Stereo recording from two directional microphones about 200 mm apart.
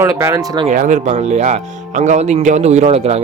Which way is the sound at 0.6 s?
40° right (ahead or behind).